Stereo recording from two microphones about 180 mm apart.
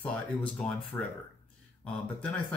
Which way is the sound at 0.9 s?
20° left (ahead or behind).